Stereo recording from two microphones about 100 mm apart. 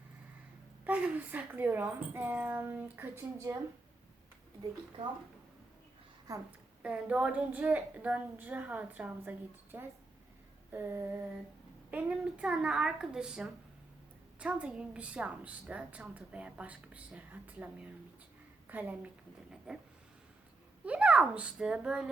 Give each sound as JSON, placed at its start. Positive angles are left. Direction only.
{"t": 0.9, "sound": "speech", "side_deg": -15}
{"t": 5.0, "sound": "speech", "side_deg": -60}
{"t": 6.8, "sound": "a woman's voice", "side_deg": -10}
{"t": 20.8, "sound": "a woman's voice", "side_deg": -10}